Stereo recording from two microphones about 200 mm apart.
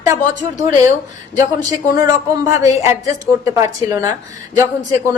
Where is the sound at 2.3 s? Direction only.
15° right (ahead or behind).